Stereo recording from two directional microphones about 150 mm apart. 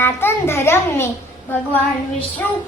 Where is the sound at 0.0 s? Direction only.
15° left (ahead or behind).